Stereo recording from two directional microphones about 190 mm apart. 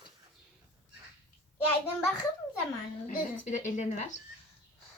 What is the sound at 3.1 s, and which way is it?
Speech, 40° left (ahead or behind).